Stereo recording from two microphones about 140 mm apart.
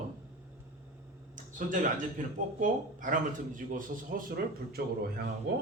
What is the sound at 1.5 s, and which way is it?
Speech, 70° right (ahead or behind).